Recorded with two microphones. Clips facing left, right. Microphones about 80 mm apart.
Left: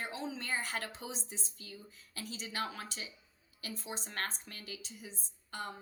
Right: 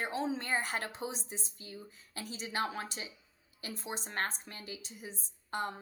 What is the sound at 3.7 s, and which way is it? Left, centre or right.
Speech, right.